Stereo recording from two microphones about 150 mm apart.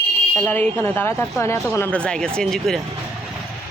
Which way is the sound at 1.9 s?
5° left (ahead or behind).